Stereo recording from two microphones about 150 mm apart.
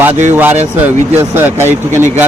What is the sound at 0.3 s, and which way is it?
A man's voice, 15° right (ahead or behind).